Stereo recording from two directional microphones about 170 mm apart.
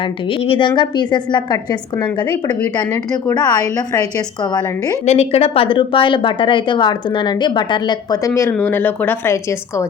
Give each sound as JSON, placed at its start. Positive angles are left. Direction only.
{"t": 0.0, "sound": "a woman's voice", "side_deg": 30}
{"t": 5.0, "sound": "speech", "side_deg": 40}
{"t": 8.3, "sound": "speech", "side_deg": 10}